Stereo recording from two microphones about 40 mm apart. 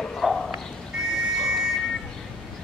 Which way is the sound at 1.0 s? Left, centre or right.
Centre.